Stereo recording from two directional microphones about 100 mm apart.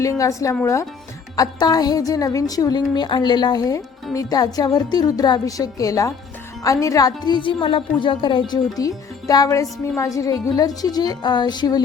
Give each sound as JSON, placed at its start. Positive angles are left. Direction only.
{"t": 0.0, "sound": "a woman's voice", "side_deg": 35}
{"t": 1.4, "sound": "a woman's voice", "side_deg": 40}